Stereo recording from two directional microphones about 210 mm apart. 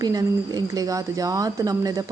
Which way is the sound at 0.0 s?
15° right (ahead or behind).